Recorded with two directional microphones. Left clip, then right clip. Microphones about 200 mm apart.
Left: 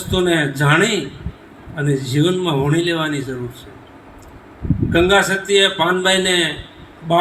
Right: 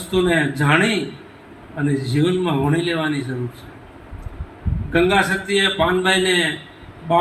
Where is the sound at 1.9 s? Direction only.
60° left (ahead or behind).